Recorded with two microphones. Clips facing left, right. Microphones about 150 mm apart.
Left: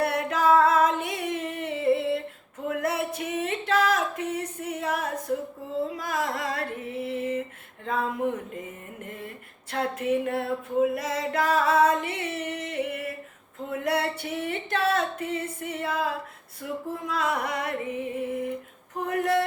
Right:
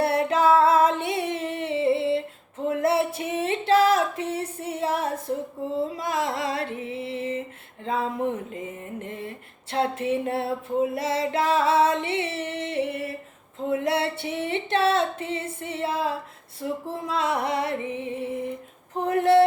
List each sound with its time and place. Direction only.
0.0 s female singing: 30° right (ahead or behind)
2.6 s a sound: 30° right (ahead or behind)
6.0 s music: 25° right (ahead or behind)
9.7 s music: 30° right (ahead or behind)
19.0 s speech: 30° right (ahead or behind)